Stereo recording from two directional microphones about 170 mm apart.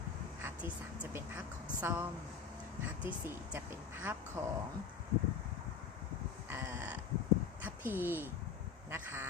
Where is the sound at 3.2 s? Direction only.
15° right (ahead or behind).